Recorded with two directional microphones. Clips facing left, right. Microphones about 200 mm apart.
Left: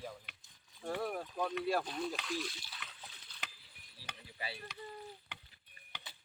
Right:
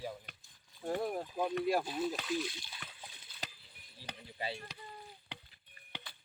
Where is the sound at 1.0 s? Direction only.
20° right (ahead or behind).